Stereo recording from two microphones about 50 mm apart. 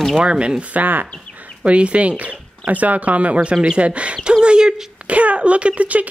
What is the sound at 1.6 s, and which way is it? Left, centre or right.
Speech, right.